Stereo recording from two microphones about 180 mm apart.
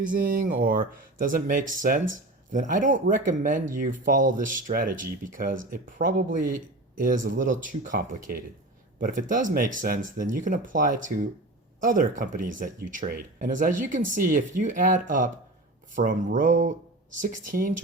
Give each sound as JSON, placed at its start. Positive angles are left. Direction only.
{"t": 0.1, "sound": "speech", "side_deg": -50}